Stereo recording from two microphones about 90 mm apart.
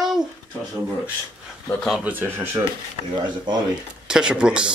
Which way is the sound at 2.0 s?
20° right (ahead or behind).